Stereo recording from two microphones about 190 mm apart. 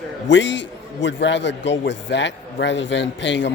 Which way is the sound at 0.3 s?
70° left (ahead or behind).